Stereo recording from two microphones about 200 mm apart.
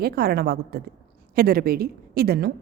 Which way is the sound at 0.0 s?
50° right (ahead or behind).